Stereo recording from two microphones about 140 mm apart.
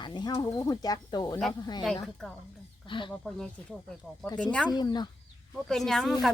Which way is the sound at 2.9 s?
35° left (ahead or behind).